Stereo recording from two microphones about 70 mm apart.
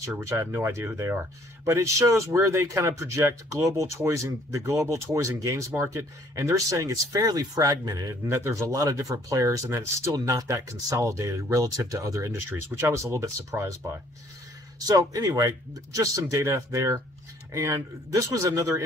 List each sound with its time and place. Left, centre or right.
0.2 s speech: right
6.3 s speech: right
8.3 s speech: right
12.4 s speech: right
14.9 s speech: right